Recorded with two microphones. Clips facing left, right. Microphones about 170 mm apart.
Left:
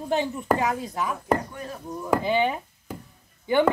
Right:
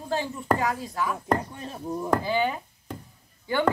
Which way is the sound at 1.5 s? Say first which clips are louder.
Right 2 dB; 25° right (ahead or behind).